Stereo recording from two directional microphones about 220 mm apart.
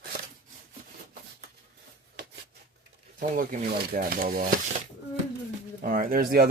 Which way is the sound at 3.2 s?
35° right (ahead or behind).